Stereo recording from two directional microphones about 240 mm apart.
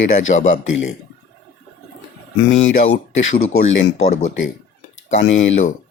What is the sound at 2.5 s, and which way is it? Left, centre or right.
Speech, left.